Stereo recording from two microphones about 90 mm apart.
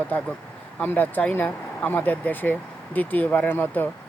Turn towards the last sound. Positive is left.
turn(degrees=20)  # may be behind; listen again after turning